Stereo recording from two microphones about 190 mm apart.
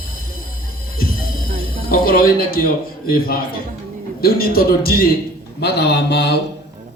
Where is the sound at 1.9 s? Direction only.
50° left (ahead or behind).